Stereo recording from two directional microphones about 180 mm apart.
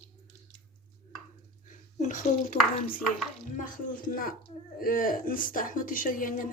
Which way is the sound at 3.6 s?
50° left (ahead or behind).